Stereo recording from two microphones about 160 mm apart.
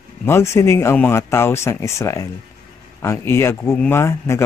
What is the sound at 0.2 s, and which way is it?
Speech, 15° left (ahead or behind).